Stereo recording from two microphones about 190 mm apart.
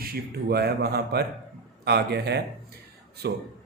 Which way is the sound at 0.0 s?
55° right (ahead or behind).